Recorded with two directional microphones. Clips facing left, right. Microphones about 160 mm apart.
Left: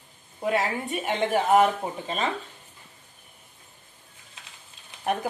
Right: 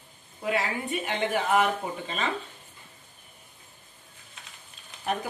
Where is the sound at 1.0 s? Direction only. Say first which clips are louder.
Left 5 dB; 40° left (ahead or behind).